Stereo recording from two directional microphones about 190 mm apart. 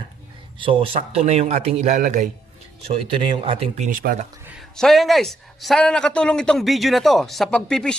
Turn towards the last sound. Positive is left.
turn(degrees=5)  # may be behind; listen again after turning